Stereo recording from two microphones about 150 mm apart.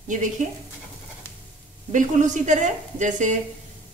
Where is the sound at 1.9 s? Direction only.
55° right (ahead or behind).